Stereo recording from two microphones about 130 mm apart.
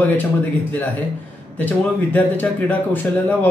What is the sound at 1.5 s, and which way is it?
Speech, 10° left (ahead or behind).